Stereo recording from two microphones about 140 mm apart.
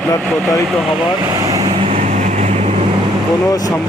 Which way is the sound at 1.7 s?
50° right (ahead or behind).